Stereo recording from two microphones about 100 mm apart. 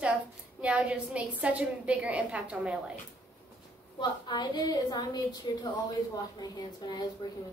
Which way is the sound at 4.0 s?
45° left (ahead or behind).